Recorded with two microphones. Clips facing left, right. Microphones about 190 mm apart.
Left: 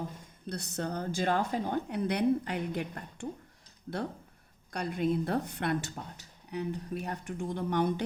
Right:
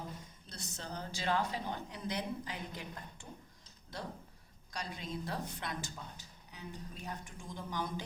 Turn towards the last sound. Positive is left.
turn(degrees=65)  # may be behind; listen again after turning